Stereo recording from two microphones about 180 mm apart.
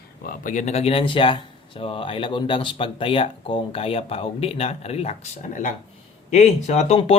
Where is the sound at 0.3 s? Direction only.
45° left (ahead or behind).